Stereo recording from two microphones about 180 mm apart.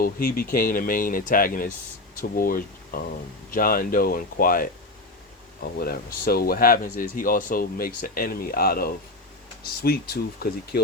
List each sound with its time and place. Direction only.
0.0 s speech: 55° left (ahead or behind)
5.8 s speech: 55° left (ahead or behind)